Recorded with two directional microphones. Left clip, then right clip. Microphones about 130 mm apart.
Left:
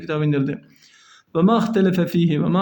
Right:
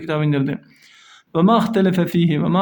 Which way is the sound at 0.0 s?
35° right (ahead or behind).